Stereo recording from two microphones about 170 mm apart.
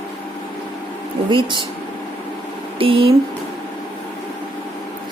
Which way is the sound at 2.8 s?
30° right (ahead or behind).